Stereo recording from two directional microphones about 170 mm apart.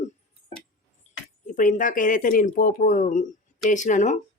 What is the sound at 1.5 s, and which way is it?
Speech, 50° left (ahead or behind).